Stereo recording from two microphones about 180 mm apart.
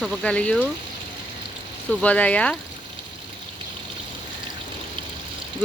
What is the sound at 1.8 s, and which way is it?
Speech, 10° left (ahead or behind).